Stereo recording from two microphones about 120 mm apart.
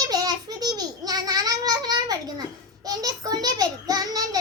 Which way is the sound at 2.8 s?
30° right (ahead or behind).